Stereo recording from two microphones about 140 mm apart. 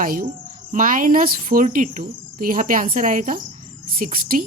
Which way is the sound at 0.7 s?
70° right (ahead or behind).